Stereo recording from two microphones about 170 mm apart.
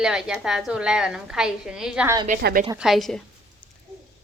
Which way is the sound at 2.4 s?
60° right (ahead or behind).